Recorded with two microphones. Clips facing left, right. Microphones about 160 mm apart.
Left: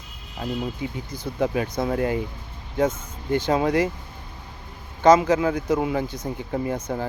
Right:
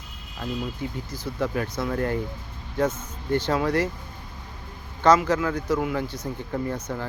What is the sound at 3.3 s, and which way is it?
Speech, 15° left (ahead or behind).